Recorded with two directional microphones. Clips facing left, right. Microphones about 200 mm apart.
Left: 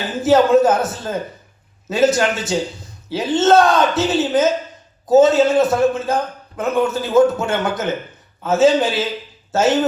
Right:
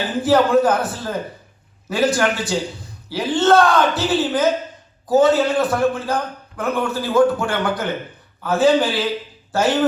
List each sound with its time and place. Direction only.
0.2 s a man's voice: 25° left (ahead or behind)